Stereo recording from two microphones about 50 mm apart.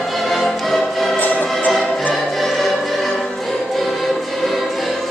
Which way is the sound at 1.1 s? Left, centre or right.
Left.